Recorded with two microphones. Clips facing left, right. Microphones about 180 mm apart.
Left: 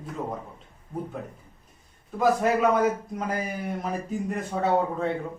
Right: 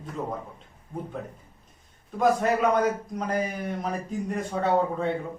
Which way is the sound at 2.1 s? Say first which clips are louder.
Even; 5° left (ahead or behind).